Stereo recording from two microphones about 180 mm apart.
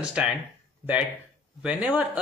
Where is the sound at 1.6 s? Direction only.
10° right (ahead or behind).